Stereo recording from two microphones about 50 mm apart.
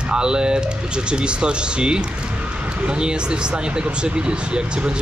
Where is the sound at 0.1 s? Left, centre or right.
Centre.